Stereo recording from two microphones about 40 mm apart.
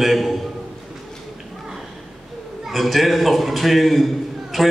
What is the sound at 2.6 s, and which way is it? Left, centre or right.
A man's voice, centre.